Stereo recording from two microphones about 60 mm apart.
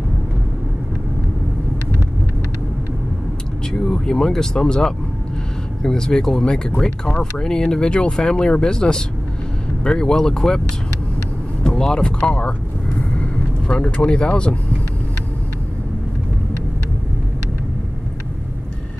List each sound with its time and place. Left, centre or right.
3.8 s speech: centre
11.6 s speech: centre